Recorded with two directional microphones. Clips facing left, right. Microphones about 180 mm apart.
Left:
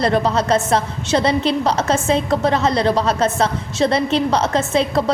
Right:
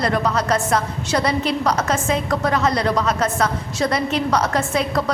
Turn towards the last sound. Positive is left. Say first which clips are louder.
# left 3 dB
turn(degrees=25)  # may be behind; listen again after turning